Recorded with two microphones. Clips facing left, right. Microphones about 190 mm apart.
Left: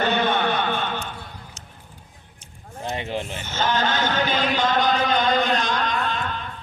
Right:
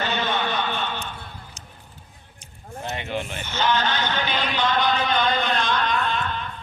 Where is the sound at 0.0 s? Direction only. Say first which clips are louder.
Left 4 dB; 55° left (ahead or behind).